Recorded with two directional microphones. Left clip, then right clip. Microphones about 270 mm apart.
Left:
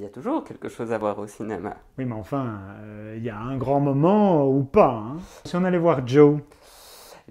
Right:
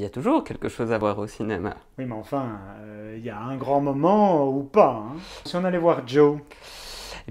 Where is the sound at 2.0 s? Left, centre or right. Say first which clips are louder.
Even; left.